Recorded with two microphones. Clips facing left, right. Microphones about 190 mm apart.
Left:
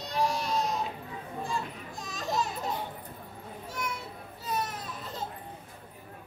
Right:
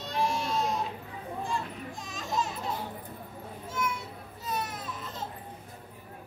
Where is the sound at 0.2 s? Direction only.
40° left (ahead or behind).